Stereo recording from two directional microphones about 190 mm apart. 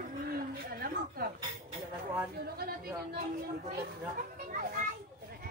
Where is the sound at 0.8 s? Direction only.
55° right (ahead or behind).